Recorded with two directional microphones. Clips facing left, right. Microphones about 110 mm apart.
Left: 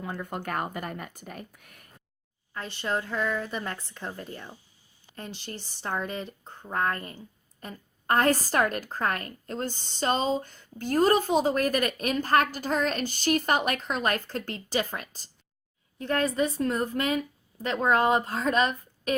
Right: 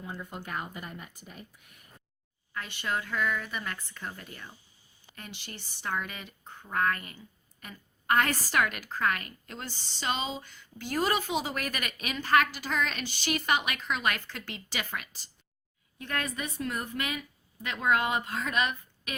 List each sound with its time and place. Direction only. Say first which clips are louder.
0.0 s speech: left 6 dB; 60° left (ahead or behind)
2.5 s speech: left 3 dB; 30° left (ahead or behind)
5.4 s a woman's voice: left 4 dB; 45° left (ahead or behind)